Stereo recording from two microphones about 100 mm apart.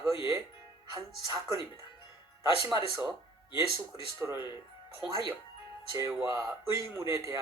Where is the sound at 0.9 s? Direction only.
35° right (ahead or behind).